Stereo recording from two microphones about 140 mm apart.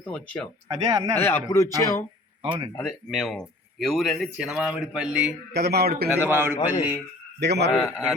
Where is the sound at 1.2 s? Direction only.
20° left (ahead or behind).